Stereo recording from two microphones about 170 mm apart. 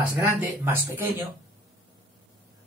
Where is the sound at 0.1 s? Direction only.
10° right (ahead or behind).